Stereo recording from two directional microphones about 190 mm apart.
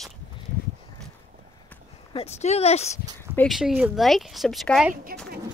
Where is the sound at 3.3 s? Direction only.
Centre (ahead or behind).